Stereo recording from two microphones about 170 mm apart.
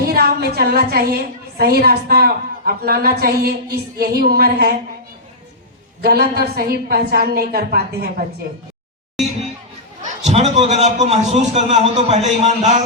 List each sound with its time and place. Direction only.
0.1 s a woman's voice: 65° right (ahead or behind)
6.0 s a woman's voice: 65° right (ahead or behind)
10.0 s a man's voice: 40° right (ahead or behind)